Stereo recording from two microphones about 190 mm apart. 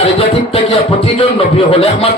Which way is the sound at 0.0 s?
30° left (ahead or behind).